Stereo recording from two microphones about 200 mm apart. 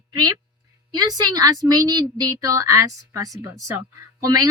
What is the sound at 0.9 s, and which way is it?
A woman's voice, 20° right (ahead or behind).